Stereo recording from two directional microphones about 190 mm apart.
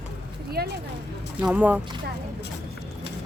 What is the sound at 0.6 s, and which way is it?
Speech, 55° right (ahead or behind).